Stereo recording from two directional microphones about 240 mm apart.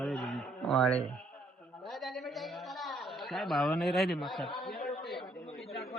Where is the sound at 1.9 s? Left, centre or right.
Centre.